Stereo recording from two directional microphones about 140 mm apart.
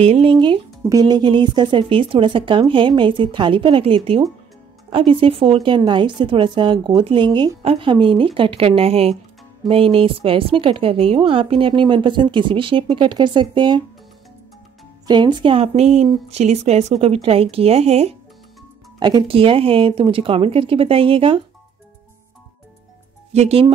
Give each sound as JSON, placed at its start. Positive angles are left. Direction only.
{"t": 0.0, "sound": "a woman's voice", "side_deg": -45}
{"t": 15.0, "sound": "a woman's voice", "side_deg": -35}
{"t": 18.9, "sound": "a woman's voice", "side_deg": -30}
{"t": 23.3, "sound": "speech", "side_deg": -50}